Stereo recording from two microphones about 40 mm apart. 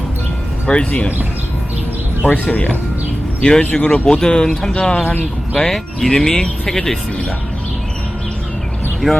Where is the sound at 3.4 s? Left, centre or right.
Left.